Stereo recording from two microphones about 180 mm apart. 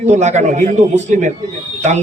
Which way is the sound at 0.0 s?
40° right (ahead or behind).